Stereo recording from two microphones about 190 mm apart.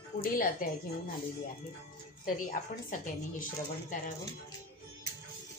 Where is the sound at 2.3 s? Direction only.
45° left (ahead or behind).